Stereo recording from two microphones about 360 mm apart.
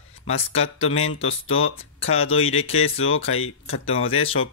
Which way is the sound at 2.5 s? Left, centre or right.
Centre.